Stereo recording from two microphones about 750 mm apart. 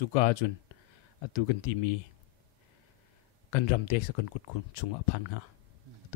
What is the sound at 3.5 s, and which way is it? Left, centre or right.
Speech, left.